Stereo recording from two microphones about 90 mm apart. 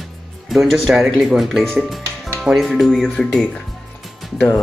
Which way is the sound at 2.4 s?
Centre (ahead or behind).